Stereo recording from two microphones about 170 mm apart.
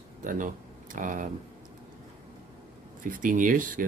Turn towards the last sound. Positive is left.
turn(degrees=-55)  # may be behind; listen again after turning